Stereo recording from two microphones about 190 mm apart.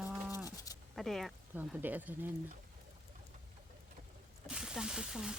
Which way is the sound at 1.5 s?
10° right (ahead or behind).